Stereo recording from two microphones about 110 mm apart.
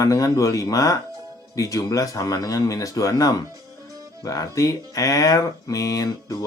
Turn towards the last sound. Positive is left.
turn(degrees=30)  # may be behind; listen again after turning